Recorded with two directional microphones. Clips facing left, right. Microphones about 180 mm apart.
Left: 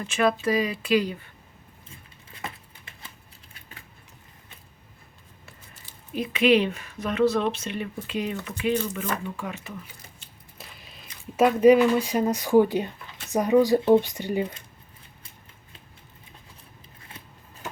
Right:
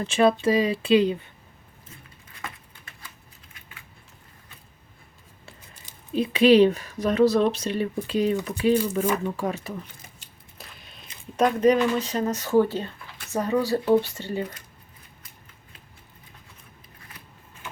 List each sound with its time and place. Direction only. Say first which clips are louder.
0.0 s speech: right 4 dB; 30° right (ahead or behind)
2.4 s a sound: left 2 dB; 25° left (ahead or behind)
6.1 s speech: right 4 dB; 30° right (ahead or behind)
10.6 s speech: even; centre (ahead or behind)